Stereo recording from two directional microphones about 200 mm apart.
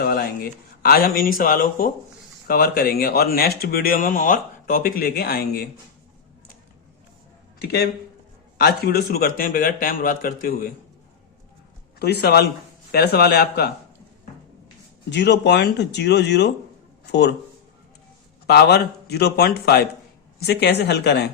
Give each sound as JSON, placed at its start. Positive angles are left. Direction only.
{"t": 0.0, "sound": "a sound", "side_deg": 50}
{"t": 0.8, "sound": "speech", "side_deg": 50}
{"t": 7.6, "sound": "speech", "side_deg": 55}
{"t": 11.9, "sound": "speech", "side_deg": 55}
{"t": 15.1, "sound": "speech", "side_deg": 60}
{"t": 18.4, "sound": "speech", "side_deg": 55}